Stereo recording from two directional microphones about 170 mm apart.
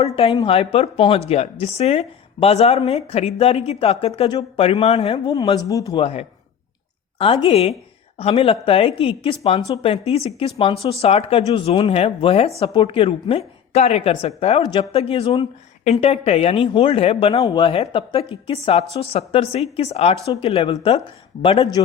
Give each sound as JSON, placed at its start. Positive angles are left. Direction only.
{"t": 0.0, "sound": "speech", "side_deg": 35}
{"t": 5.5, "sound": "speech", "side_deg": 20}
{"t": 6.0, "sound": "speech", "side_deg": 35}
{"t": 7.4, "sound": "speech", "side_deg": 35}